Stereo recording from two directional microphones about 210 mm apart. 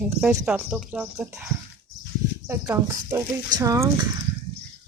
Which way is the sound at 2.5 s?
10° right (ahead or behind).